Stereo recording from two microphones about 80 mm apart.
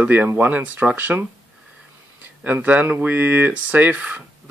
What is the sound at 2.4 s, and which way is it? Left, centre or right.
Speech, right.